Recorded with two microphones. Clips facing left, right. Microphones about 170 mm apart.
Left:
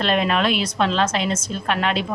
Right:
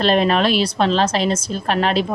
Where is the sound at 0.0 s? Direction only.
35° right (ahead or behind).